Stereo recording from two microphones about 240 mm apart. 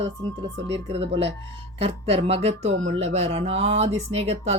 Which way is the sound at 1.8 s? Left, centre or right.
Right.